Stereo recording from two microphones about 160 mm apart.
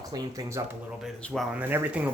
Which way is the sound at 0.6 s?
20° right (ahead or behind).